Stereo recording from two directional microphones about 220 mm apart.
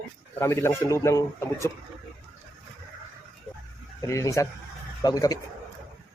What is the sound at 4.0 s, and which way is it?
A man's voice, 15° left (ahead or behind).